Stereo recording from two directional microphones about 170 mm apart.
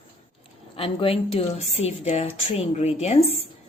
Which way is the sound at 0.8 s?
35° left (ahead or behind).